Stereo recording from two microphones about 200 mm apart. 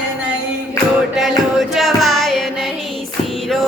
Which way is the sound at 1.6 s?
Centre (ahead or behind).